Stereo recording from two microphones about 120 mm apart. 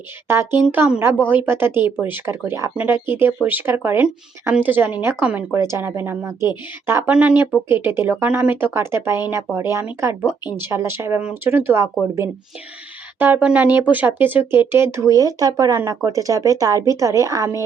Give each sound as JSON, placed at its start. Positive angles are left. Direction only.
{"t": 0.3, "sound": "speech", "side_deg": -20}
{"t": 5.5, "sound": "speech", "side_deg": -25}
{"t": 7.1, "sound": "speech", "side_deg": -10}
{"t": 13.1, "sound": "speech", "side_deg": -15}